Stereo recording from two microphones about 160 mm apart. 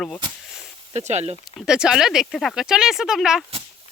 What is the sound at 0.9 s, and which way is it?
Speech, 45° right (ahead or behind).